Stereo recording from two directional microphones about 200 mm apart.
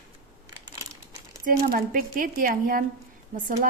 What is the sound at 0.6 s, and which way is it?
Crumpling, 15° right (ahead or behind).